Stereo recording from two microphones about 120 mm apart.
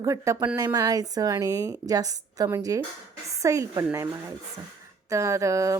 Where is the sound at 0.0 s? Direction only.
25° right (ahead or behind).